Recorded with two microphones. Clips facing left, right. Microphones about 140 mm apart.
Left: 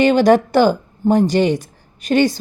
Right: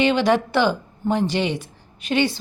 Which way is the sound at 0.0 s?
45° left (ahead or behind).